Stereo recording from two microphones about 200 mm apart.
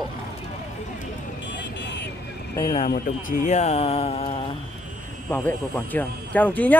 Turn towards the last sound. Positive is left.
turn(degrees=10)  # may be behind; listen again after turning